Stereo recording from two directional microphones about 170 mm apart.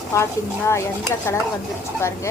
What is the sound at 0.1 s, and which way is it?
A woman's voice, 15° left (ahead or behind).